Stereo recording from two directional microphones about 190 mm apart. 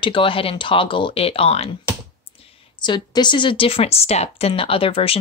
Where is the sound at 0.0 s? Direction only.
25° left (ahead or behind).